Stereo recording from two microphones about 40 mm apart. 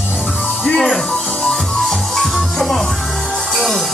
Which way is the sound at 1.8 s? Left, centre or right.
Centre.